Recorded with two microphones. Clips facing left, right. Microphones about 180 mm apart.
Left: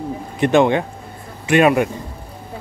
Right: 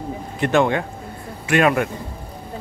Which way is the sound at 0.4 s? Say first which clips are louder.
Left 4 dB; 20° left (ahead or behind).